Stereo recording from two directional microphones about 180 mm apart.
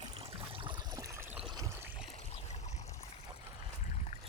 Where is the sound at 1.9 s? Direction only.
35° left (ahead or behind).